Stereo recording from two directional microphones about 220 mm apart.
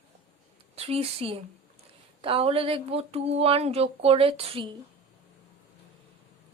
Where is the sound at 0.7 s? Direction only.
25° right (ahead or behind).